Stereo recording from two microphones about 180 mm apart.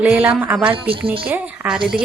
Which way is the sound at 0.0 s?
10° right (ahead or behind).